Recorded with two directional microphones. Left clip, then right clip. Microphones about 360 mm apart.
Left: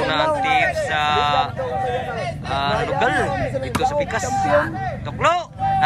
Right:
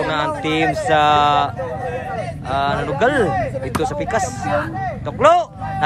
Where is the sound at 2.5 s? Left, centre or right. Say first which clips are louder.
Right 1 dB; centre.